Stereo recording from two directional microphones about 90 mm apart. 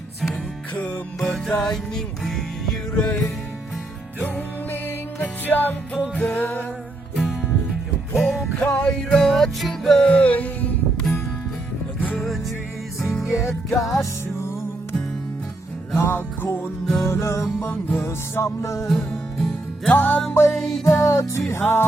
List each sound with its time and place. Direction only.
0.8 s music: 10° left (ahead or behind)
4.4 s music: 20° left (ahead or behind)
8.1 s music: 5° left (ahead or behind)
11.9 s music: 15° left (ahead or behind)
13.0 s music: centre (ahead or behind)
13.7 s music: 40° left (ahead or behind)
16.0 s music: 25° left (ahead or behind)
16.8 s music: centre (ahead or behind)
17.1 s music: 30° left (ahead or behind)
18.9 s music: 5° left (ahead or behind)
19.8 s music: 20° left (ahead or behind)
20.8 s music: 35° left (ahead or behind)